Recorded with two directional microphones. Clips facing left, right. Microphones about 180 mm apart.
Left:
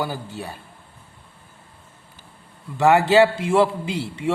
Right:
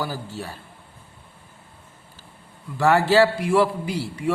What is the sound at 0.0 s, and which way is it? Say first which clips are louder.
Speech: left 2 dB; 20° left (ahead or behind).